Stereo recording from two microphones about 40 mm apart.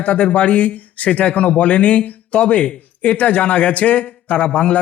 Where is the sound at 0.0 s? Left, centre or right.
Left.